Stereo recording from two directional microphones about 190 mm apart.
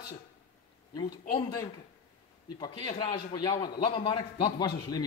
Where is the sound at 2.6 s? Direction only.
25° left (ahead or behind).